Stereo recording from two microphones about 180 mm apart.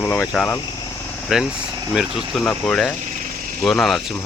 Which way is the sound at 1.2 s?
5° right (ahead or behind).